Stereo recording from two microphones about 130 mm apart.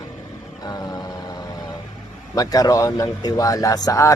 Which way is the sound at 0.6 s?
30° left (ahead or behind).